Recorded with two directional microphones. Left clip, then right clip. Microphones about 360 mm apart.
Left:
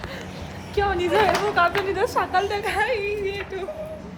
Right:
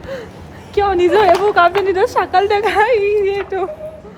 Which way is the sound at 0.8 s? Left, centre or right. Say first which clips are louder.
Right 8 dB; right.